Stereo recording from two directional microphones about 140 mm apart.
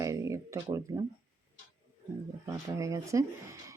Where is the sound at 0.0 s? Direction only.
25° right (ahead or behind).